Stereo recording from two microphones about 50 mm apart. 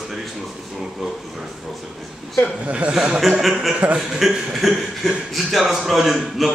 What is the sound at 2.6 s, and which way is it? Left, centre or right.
Speech, right.